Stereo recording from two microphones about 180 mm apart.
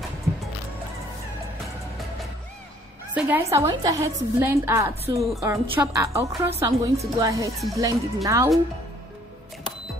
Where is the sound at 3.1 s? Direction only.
10° right (ahead or behind).